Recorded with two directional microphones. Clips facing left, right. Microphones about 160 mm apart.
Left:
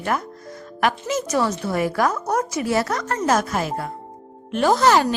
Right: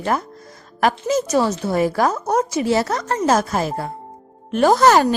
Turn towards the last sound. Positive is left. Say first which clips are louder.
# right 3 dB
turn(degrees=-45)  # may be behind; listen again after turning